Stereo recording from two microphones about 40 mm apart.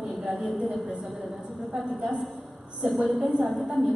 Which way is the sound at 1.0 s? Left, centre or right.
Centre.